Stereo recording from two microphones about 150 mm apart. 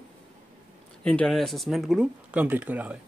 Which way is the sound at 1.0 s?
5° left (ahead or behind).